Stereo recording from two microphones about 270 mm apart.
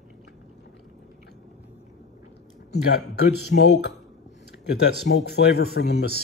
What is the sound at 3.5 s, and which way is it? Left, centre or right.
Speech, left.